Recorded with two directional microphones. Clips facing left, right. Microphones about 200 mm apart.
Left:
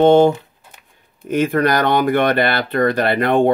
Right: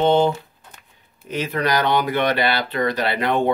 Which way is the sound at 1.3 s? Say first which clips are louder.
Left 6 dB; 50° left (ahead or behind).